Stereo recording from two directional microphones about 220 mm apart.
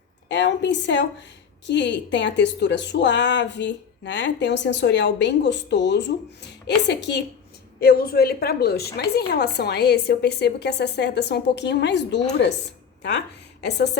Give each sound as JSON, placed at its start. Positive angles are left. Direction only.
{"t": 0.3, "sound": "a woman's voice", "side_deg": 55}